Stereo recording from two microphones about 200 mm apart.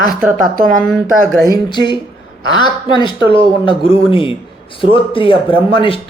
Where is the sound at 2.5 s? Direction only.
20° left (ahead or behind).